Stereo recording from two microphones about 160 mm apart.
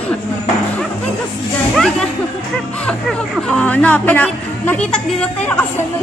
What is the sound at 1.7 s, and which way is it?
Speech, centre (ahead or behind).